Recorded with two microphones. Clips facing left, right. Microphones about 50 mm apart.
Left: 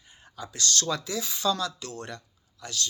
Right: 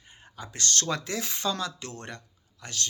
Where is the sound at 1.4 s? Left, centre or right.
Right.